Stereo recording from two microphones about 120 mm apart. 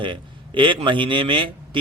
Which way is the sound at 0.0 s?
45° right (ahead or behind).